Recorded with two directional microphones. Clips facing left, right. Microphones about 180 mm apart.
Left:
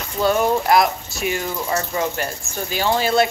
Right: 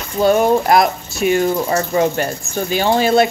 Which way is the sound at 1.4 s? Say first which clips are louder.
Right 7 dB; 30° right (ahead or behind).